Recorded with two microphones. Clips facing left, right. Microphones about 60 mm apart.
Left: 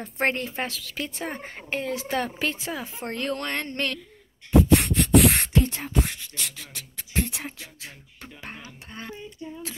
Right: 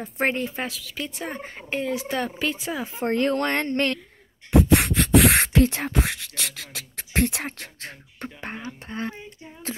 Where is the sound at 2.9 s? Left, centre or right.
Right.